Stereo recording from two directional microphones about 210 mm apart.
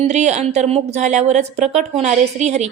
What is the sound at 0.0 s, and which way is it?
Speech, 35° right (ahead or behind).